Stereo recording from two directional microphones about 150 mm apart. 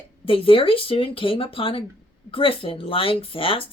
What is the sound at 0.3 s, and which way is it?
Speech, 35° left (ahead or behind).